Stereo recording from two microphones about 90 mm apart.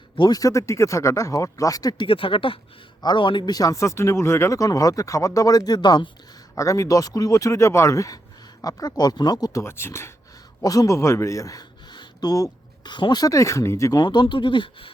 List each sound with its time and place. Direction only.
0.2 s speech: 45° left (ahead or behind)
2.0 s speech: 75° left (ahead or behind)
3.0 s speech: 60° left (ahead or behind)
6.6 s speech: 35° left (ahead or behind)
9.5 s speech: 30° left (ahead or behind)
10.6 s speech: 40° left (ahead or behind)
11.9 s a sound: 50° left (ahead or behind)
13.2 s speech: 35° left (ahead or behind)
14.0 s speech: 55° left (ahead or behind)